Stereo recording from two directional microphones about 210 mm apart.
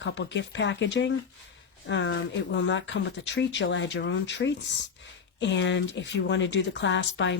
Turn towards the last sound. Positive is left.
turn(degrees=60)  # may be behind; listen again after turning